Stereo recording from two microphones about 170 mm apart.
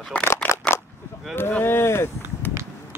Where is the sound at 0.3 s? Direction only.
10° left (ahead or behind).